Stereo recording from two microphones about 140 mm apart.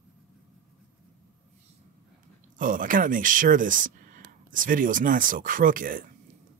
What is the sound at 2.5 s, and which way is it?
Speech, 75° right (ahead or behind).